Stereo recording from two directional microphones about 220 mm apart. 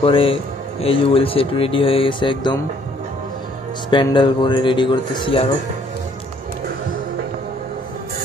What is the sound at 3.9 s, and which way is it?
Speech, 20° left (ahead or behind).